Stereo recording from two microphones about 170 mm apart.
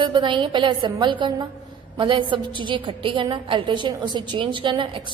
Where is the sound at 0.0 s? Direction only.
25° right (ahead or behind).